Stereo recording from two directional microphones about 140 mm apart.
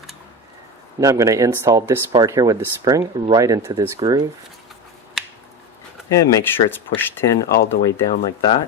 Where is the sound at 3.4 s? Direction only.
20° right (ahead or behind).